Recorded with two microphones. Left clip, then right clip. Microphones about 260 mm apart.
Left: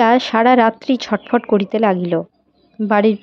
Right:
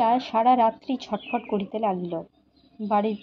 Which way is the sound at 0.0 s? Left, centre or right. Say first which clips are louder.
Left 8 dB; left.